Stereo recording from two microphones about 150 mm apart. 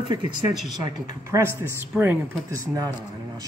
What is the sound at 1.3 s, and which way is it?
Speech, 20° right (ahead or behind).